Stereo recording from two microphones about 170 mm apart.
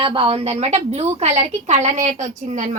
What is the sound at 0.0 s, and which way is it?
A woman's voice, 30° right (ahead or behind).